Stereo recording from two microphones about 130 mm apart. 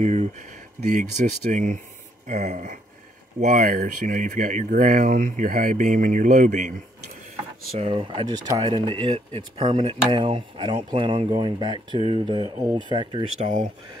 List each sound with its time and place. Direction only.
0.0 s speech: 60° right (ahead or behind)
7.9 s speech: 40° right (ahead or behind)
13.4 s speech: 75° right (ahead or behind)